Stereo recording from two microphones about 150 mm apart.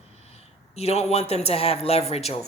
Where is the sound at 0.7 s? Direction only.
45° left (ahead or behind).